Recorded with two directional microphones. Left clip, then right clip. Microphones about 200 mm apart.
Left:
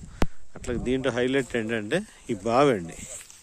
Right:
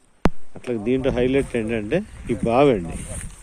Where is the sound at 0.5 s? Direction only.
30° left (ahead or behind).